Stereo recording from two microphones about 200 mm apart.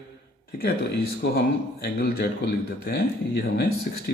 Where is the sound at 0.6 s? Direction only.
50° left (ahead or behind).